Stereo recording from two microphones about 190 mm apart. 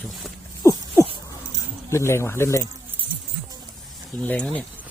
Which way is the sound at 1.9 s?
15° left (ahead or behind).